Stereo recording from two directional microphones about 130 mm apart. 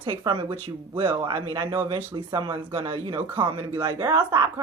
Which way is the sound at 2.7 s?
20° right (ahead or behind).